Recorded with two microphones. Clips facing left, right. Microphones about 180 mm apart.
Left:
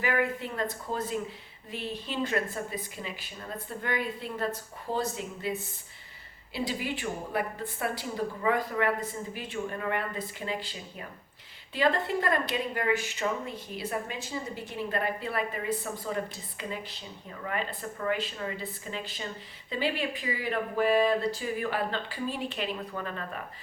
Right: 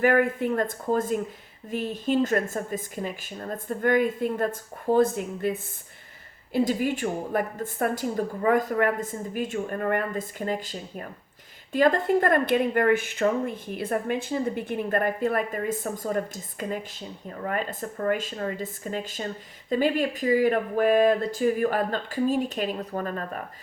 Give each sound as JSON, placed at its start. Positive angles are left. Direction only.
{"t": 0.0, "sound": "speech", "side_deg": -50}